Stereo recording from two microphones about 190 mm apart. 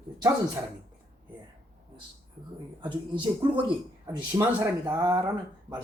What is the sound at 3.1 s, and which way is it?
Speech, 25° right (ahead or behind).